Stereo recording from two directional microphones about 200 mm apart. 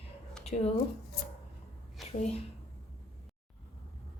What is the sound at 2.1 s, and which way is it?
Speech, 30° left (ahead or behind).